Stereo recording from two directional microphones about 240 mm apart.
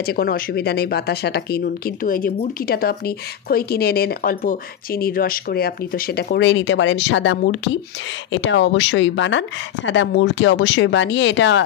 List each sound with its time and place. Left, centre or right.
0.0 s speech: left